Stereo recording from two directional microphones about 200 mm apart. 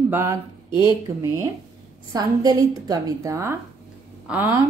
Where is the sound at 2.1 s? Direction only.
20° right (ahead or behind).